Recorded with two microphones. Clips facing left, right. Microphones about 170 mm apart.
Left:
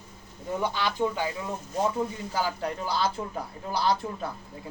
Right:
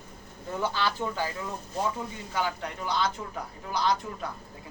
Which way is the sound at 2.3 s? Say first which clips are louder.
Right 1 dB; 30° left (ahead or behind).